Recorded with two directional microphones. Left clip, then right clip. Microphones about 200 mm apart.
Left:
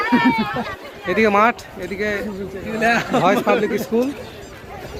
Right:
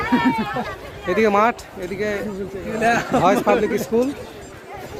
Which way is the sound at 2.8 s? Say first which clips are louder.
Left 1 dB; 45° right (ahead or behind).